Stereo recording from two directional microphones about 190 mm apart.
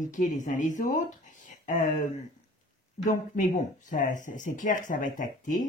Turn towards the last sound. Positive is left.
turn(degrees=45)  # may be behind; listen again after turning